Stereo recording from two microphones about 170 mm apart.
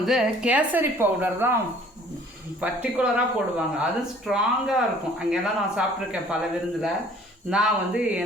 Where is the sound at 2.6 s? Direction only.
5° right (ahead or behind).